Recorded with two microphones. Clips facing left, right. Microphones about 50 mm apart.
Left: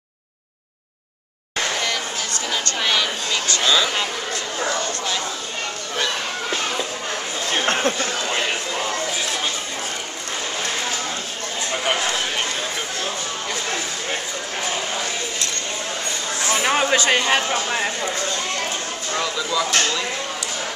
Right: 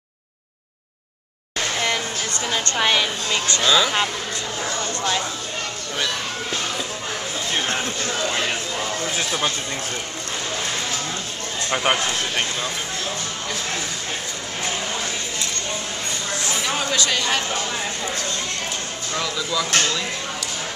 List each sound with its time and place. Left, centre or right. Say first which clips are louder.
2.8 s a woman's voice: right 2 dB; centre
3.6 s speech: right 1 dB; centre
7.6 s a sound: left 4 dB; left
8.2 s a sound: even; centre
16.5 s speech: left 6 dB; left
19.1 s speech: left 2 dB; centre